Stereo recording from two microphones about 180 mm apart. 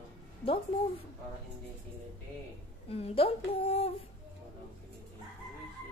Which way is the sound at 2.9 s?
35° left (ahead or behind).